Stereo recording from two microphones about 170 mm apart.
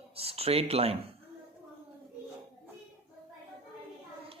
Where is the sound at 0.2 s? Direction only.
35° right (ahead or behind).